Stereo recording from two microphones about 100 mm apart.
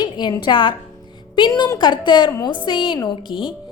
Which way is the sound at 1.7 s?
50° left (ahead or behind).